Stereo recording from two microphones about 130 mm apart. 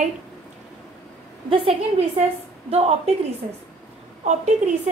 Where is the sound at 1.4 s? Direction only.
45° right (ahead or behind).